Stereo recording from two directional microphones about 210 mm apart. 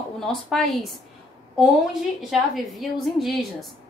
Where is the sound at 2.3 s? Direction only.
Centre (ahead or behind).